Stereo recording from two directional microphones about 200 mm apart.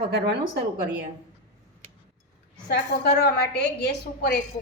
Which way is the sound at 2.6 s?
55° left (ahead or behind).